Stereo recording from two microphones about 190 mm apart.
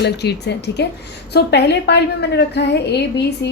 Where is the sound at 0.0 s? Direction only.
60° left (ahead or behind).